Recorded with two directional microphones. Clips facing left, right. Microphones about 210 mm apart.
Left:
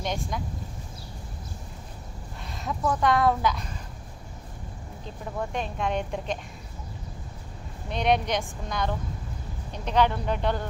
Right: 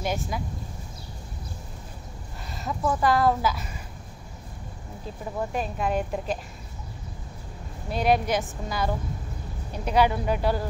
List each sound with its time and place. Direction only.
0.0 s a woman's voice: 5° right (ahead or behind)
2.5 s a woman's voice: centre (ahead or behind)
5.4 s a woman's voice: 5° right (ahead or behind)
7.9 s a woman's voice: 5° right (ahead or behind)